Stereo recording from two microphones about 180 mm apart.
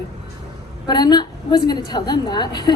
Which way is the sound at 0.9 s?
25° left (ahead or behind).